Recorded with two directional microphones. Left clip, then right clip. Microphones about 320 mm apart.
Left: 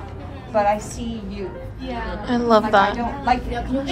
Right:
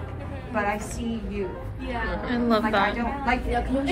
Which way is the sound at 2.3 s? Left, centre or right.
Centre.